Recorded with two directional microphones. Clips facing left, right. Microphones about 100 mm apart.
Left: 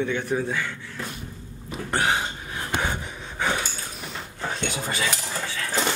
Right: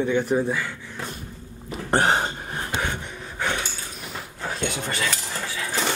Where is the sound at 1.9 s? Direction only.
40° right (ahead or behind).